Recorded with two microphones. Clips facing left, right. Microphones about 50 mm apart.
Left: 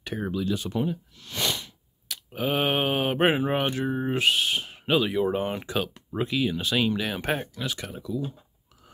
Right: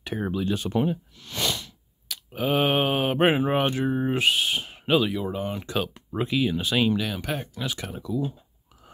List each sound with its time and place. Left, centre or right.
0.0 s speech: centre
0.5 s speech: right
1.3 s a sound: centre
2.0 s speech: centre
5.1 s speech: left
5.7 s speech: centre